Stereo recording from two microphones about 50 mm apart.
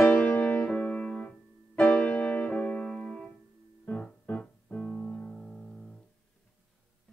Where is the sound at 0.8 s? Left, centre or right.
Left.